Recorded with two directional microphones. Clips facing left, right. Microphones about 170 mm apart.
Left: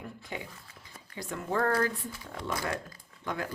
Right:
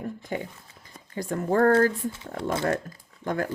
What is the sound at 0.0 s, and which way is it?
Speech, 45° right (ahead or behind).